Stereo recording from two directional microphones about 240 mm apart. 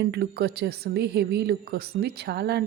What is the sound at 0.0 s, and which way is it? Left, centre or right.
A woman's voice, right.